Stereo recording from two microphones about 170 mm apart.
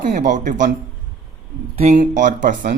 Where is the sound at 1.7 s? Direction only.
45° right (ahead or behind).